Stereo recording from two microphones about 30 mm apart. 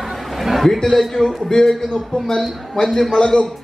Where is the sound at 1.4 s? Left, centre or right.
Centre.